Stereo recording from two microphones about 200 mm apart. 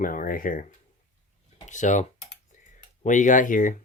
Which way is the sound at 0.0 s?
45° left (ahead or behind).